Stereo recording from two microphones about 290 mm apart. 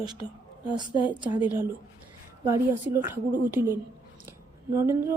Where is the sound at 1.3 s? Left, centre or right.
Centre.